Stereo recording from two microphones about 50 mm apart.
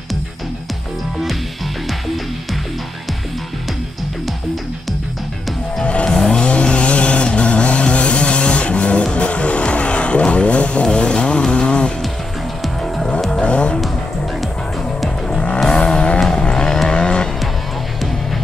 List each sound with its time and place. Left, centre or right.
5.9 s vehicle: left
6.1 s vehicle: centre
6.4 s a sound: left
11.5 s music: centre
12.6 s music: centre
13.3 s vehicle: left
15.2 s vehicle: left